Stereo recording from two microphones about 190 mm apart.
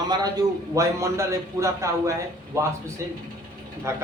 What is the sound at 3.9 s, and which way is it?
Speech, 15° right (ahead or behind).